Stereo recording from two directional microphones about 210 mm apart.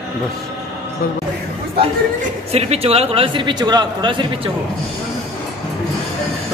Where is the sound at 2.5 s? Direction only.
30° right (ahead or behind).